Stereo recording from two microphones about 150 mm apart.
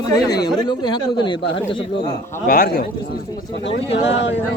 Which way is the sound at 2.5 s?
85° left.